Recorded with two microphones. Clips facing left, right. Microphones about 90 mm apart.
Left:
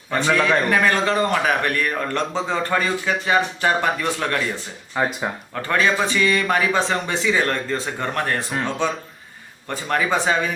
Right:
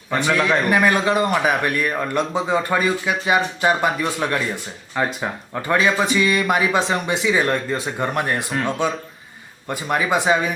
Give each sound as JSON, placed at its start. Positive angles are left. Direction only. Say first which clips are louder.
{"t": 0.2, "sound": "speech", "louder": "left 1 dB", "side_deg": -10}
{"t": 1.2, "sound": "speech", "louder": "right 1 dB", "side_deg": -5}
{"t": 4.9, "sound": "speech", "louder": "even", "side_deg": 5}
{"t": 5.6, "sound": "speech", "louder": "right 1 dB", "side_deg": -15}
{"t": 9.6, "sound": "speech", "louder": "right 1 dB", "side_deg": -15}